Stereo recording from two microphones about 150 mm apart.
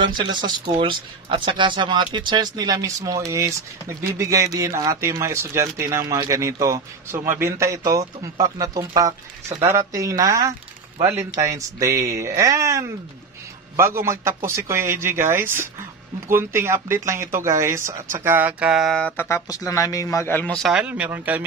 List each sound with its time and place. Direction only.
0.0 s a man's voice: 30° right (ahead or behind); by 20.5 s 15° left (ahead or behind)
20.5 s a man's voice: 5° right (ahead or behind)